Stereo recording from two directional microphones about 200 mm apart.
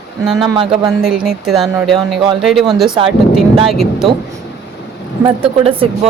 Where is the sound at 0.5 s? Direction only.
25° right (ahead or behind).